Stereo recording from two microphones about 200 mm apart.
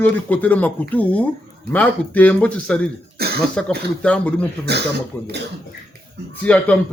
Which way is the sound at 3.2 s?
50° right (ahead or behind).